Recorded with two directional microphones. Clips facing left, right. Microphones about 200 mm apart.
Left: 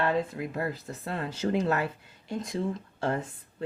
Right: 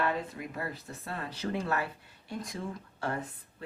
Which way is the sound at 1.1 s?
20° left (ahead or behind).